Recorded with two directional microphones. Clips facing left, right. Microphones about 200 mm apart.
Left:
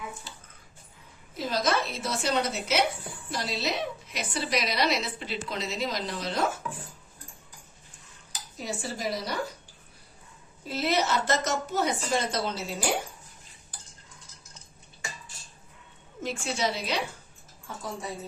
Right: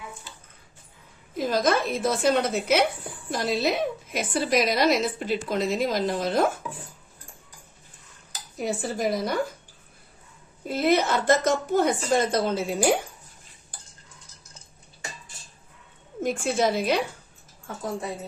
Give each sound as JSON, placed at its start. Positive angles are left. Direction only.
{"t": 1.4, "sound": "a woman's voice", "side_deg": -50}
{"t": 8.5, "sound": "a woman's voice", "side_deg": -55}
{"t": 10.7, "sound": "a woman's voice", "side_deg": -50}
{"t": 16.2, "sound": "a woman's voice", "side_deg": -50}